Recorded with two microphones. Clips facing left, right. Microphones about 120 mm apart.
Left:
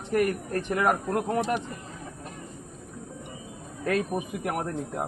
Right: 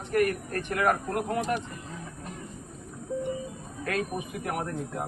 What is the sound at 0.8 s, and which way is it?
Speech, 25° left (ahead or behind).